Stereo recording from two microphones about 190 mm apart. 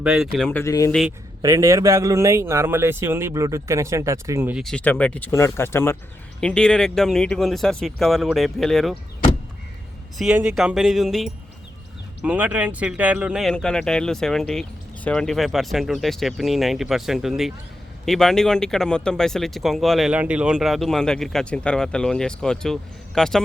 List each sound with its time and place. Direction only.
0.0 s speech: 5° right (ahead or behind)
0.6 s speech: 15° left (ahead or behind)
1.4 s speech: 15° right (ahead or behind)
4.6 s speech: 5° left (ahead or behind)
10.2 s speech: 5° right (ahead or behind)